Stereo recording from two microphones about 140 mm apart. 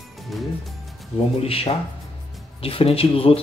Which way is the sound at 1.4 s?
45° left (ahead or behind).